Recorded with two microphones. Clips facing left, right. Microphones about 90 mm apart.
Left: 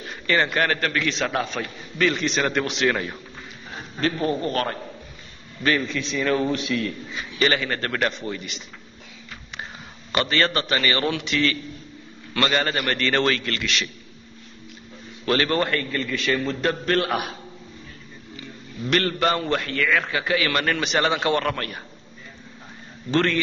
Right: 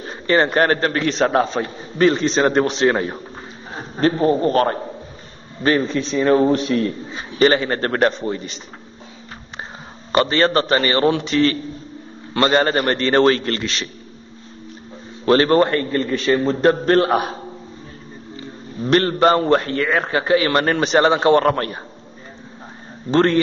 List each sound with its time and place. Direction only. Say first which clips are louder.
0.0 s a man's voice: right 6 dB; 35° right (ahead or behind)
10.1 s a man's voice: right 6 dB; 35° right (ahead or behind)
15.2 s a man's voice: right 8 dB; 35° right (ahead or behind)
23.1 s a man's voice: right 6 dB; 35° right (ahead or behind)